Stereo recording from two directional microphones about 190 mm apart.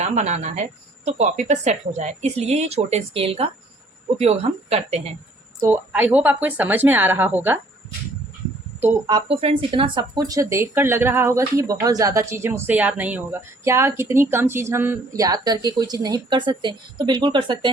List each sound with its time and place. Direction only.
0.0 s speech: 35° right (ahead or behind)
5.5 s speech: 10° right (ahead or behind)
8.8 s speech: 10° right (ahead or behind)
9.1 s speech: 30° right (ahead or behind)